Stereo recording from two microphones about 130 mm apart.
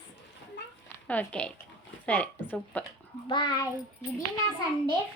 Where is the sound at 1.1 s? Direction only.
10° left (ahead or behind).